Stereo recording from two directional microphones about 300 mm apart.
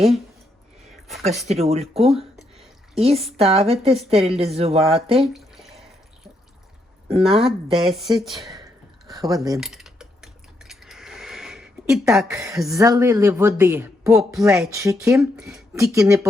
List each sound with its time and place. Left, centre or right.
1.5 s a woman's voice: right
5.2 s drip: centre
7.1 s speech: centre
8.2 s speech: centre
9.0 s speech: centre
9.6 s speech: centre